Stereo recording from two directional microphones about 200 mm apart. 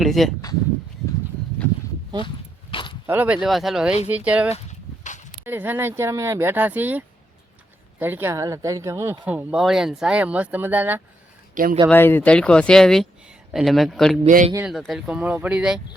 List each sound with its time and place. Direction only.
0.0 s speech: centre (ahead or behind)
2.2 s a sound: 25° left (ahead or behind)
3.1 s speech: 10° right (ahead or behind)
4.5 s a sound: 35° left (ahead or behind)
5.5 s speech: 10° right (ahead or behind)
11.5 s speech: 45° right (ahead or behind)
11.9 s speech: 10° left (ahead or behind)
14.3 s speech: 40° right (ahead or behind)
14.7 s speech: centre (ahead or behind)